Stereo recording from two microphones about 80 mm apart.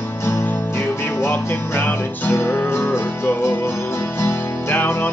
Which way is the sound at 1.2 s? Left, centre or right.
Left.